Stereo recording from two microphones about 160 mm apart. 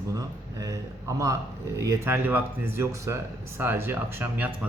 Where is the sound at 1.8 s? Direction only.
15° right (ahead or behind).